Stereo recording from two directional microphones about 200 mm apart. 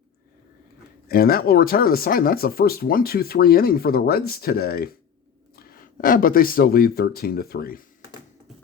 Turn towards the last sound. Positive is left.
turn(degrees=50)  # may be behind; listen again after turning